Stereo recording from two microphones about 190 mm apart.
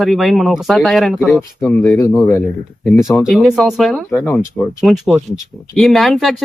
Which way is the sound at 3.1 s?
Centre (ahead or behind).